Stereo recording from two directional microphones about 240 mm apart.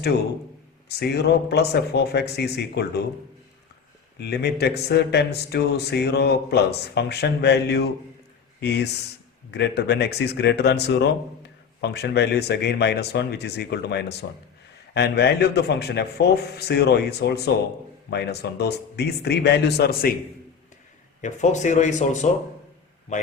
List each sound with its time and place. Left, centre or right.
0.9 s speech: left
4.2 s speech: left
21.2 s speech: left